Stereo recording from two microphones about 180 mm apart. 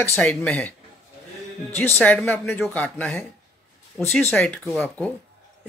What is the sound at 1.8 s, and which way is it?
Speech, 10° left (ahead or behind).